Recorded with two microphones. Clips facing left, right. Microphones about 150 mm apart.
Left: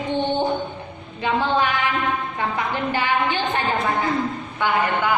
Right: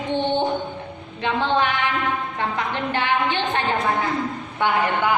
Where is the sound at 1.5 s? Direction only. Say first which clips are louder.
Even; centre (ahead or behind).